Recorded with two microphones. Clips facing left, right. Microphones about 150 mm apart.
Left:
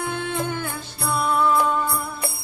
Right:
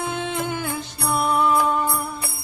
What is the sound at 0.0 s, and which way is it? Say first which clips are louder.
Music: even; 20° right (ahead or behind).